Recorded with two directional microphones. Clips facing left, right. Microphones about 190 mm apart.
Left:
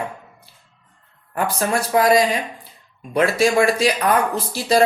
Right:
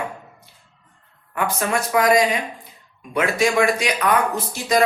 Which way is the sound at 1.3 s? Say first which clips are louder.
Left 1 dB; 35° left (ahead or behind).